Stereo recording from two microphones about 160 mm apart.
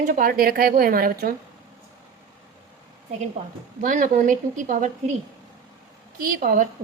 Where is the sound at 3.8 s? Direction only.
55° right (ahead or behind).